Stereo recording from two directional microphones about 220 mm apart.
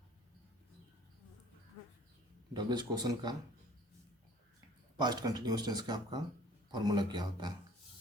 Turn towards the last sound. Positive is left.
turn(degrees=-20)  # may be behind; listen again after turning